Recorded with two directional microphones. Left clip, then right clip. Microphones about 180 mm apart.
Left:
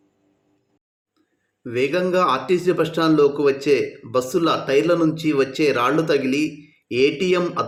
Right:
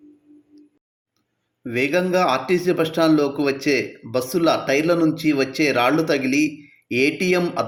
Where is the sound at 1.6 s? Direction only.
10° right (ahead or behind).